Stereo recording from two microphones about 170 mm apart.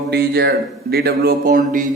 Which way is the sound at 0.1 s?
70° right (ahead or behind).